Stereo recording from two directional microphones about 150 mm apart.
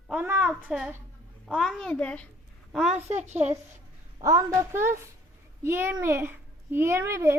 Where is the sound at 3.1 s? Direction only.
50° right (ahead or behind).